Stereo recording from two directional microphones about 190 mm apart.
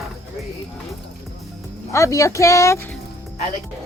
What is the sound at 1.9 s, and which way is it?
Speech, 15° left (ahead or behind).